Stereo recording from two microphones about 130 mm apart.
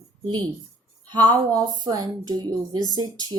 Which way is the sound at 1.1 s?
30° right (ahead or behind).